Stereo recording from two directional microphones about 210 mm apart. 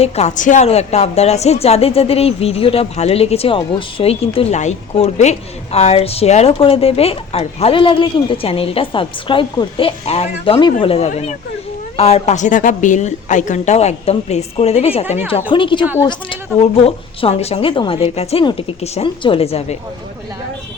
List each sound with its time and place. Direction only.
0.0 s a woman's voice: 30° left (ahead or behind)